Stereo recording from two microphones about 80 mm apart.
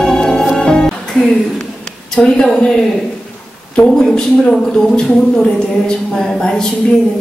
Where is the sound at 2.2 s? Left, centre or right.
Centre.